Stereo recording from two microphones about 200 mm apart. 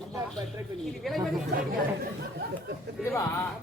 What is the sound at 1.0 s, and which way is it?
Speech, centre (ahead or behind).